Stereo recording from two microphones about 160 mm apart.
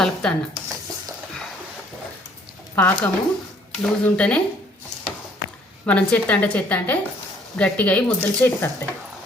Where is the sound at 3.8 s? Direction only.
5° left (ahead or behind).